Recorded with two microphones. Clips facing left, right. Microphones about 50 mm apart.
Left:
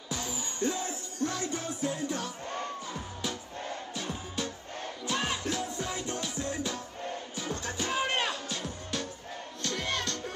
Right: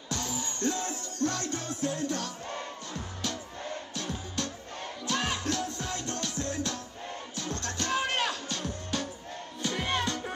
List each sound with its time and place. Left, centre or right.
0.1 s music: centre
9.6 s music: centre